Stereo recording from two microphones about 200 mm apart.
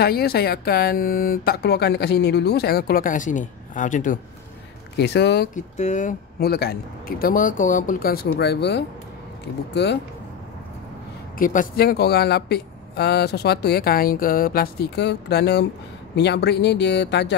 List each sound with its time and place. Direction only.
0.0 s speech: 50° left (ahead or behind)
4.9 s speech: 55° left (ahead or behind)
5.5 s speech: 40° left (ahead or behind); by 8.8 s 55° left (ahead or behind)
11.3 s speech: 40° left (ahead or behind); by 17.4 s 60° left (ahead or behind)